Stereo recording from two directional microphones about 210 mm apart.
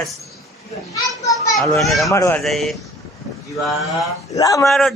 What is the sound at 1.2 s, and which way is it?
Children playing, 15° left (ahead or behind).